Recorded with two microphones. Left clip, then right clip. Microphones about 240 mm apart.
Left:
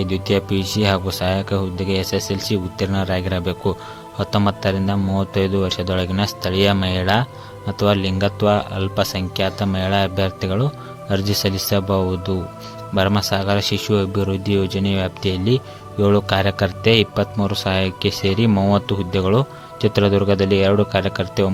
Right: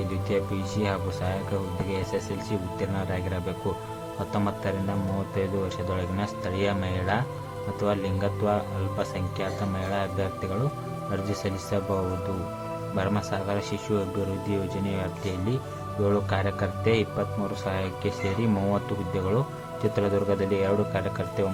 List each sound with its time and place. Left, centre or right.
0.3 s a man's voice: left
13.0 s a man's voice: left